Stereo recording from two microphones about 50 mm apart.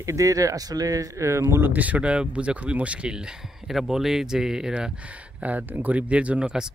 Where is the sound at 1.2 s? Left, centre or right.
Right.